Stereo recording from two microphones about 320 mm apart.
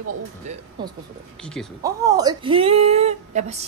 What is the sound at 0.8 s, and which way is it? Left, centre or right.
Speech, centre.